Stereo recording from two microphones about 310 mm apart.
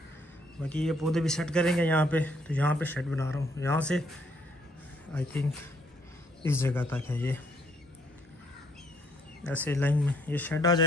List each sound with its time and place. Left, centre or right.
0.6 s a man's voice: centre
5.1 s speech: centre
9.4 s a man's voice: centre